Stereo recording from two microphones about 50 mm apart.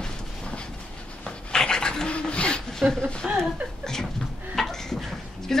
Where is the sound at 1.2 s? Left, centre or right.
Centre.